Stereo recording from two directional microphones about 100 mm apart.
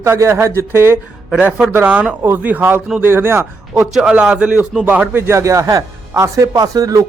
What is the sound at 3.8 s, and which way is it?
A man's voice, 10° right (ahead or behind).